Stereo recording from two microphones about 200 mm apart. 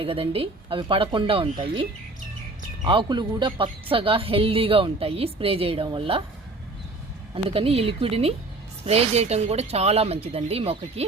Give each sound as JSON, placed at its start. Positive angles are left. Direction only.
{"t": 0.0, "sound": "a woman's voice", "side_deg": -30}
{"t": 7.3, "sound": "a woman's voice", "side_deg": -30}